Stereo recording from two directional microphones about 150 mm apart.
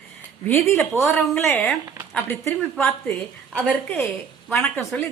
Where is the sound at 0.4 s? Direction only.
15° left (ahead or behind).